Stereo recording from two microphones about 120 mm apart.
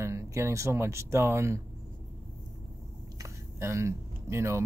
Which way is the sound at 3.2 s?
25° right (ahead or behind).